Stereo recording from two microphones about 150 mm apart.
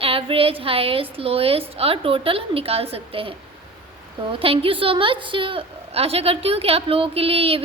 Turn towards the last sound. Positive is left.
turn(degrees=-40)  # may be behind; listen again after turning